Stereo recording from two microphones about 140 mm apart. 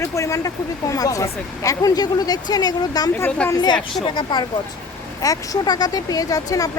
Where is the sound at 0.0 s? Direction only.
20° left (ahead or behind).